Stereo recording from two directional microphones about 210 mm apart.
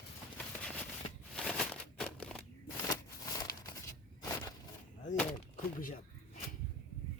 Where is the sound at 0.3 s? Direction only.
5° left (ahead or behind).